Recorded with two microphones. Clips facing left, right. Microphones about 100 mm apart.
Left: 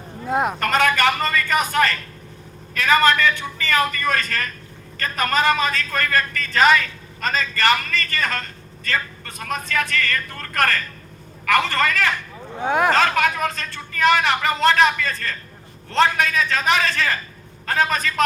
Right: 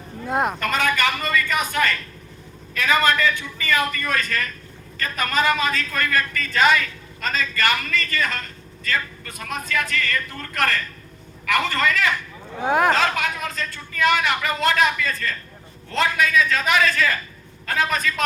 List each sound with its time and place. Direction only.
0.3 s speech: centre (ahead or behind)
0.6 s a sound: 45° left (ahead or behind)
2.7 s a man's voice: 35° left (ahead or behind)
12.6 s speech: centre (ahead or behind)
12.9 s a man's voice: 45° left (ahead or behind)